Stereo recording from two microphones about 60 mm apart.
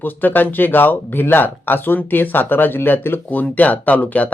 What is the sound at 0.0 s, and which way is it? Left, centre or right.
Speech, left.